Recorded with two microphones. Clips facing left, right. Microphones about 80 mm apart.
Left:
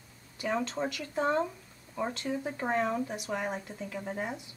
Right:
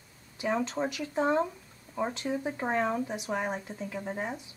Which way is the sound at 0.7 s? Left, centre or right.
Centre.